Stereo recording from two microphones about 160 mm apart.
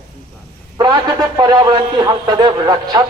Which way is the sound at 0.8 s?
25° right (ahead or behind).